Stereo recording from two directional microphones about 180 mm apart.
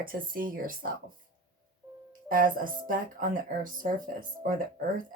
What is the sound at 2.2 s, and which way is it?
Speech, 50° right (ahead or behind).